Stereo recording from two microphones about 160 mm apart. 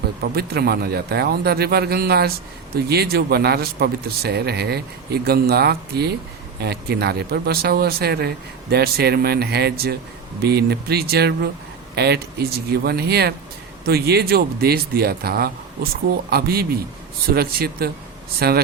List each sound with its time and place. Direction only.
0.3 s speech: 80° right